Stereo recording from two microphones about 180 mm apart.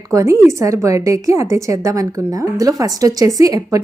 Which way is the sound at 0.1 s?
20° right (ahead or behind).